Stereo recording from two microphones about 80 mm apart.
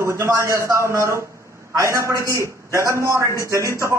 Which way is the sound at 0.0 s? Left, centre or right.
Right.